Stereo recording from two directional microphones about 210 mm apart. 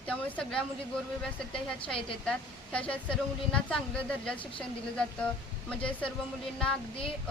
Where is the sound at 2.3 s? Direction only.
5° left (ahead or behind).